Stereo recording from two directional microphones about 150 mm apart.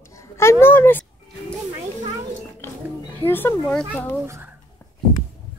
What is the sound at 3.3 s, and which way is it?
Speech, 15° left (ahead or behind).